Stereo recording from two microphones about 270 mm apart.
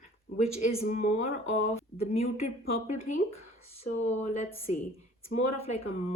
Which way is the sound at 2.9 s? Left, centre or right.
Left.